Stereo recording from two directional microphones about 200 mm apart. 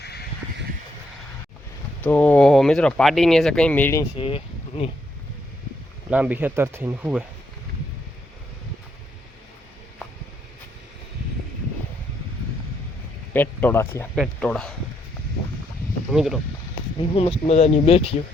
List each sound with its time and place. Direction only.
0.0 s vehicle: 55° left (ahead or behind)
2.0 s speech: 10° left (ahead or behind)
4.2 s speech: 30° left (ahead or behind)
6.1 s speech: 5° right (ahead or behind)
13.3 s speech: 10° left (ahead or behind)
16.1 s speech: centre (ahead or behind)
17.1 s speech: 30° left (ahead or behind)